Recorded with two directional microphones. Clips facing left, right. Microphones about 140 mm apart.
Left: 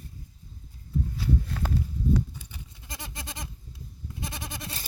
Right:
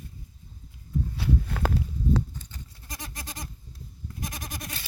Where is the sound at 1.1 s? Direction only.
65° right (ahead or behind).